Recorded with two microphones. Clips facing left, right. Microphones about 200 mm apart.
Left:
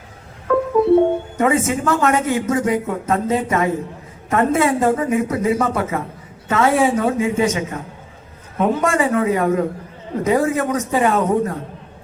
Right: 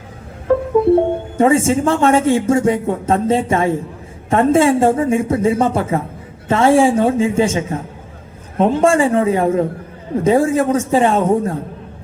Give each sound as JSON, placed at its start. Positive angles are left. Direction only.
{"t": 0.5, "sound": "music", "side_deg": -30}
{"t": 1.4, "sound": "a man's voice", "side_deg": -30}